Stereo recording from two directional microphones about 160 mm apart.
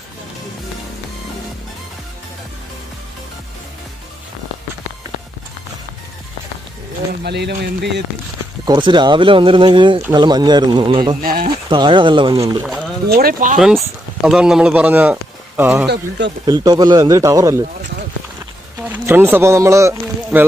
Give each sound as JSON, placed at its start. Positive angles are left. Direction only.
{"t": 7.2, "sound": "speech", "side_deg": -90}
{"t": 8.6, "sound": "speech", "side_deg": -30}
{"t": 12.6, "sound": "a sound", "side_deg": 0}
{"t": 13.1, "sound": "speech", "side_deg": -65}
{"t": 13.6, "sound": "speech", "side_deg": -5}
{"t": 15.9, "sound": "speech", "side_deg": -90}
{"t": 16.4, "sound": "speech", "side_deg": -25}
{"t": 18.9, "sound": "speech", "side_deg": -10}